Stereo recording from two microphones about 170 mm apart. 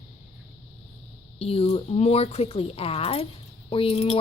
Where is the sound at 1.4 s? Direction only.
35° left (ahead or behind).